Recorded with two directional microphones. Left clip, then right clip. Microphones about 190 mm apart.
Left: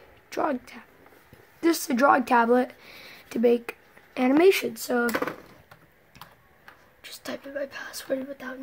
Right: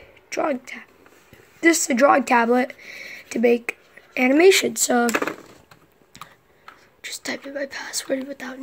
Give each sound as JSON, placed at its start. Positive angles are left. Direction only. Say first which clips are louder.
{"t": 0.3, "sound": "a woman's voice", "louder": "right 4 dB", "side_deg": 0}
{"t": 4.6, "sound": "speech", "louder": "right 7 dB", "side_deg": -25}
{"t": 7.0, "sound": "speech", "louder": "right 7 dB", "side_deg": -20}